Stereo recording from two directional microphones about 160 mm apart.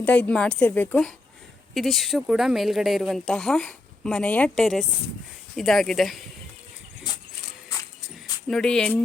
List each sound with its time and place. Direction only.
0.0 s speech: 5° left (ahead or behind)
8.4 s speech: 5° left (ahead or behind)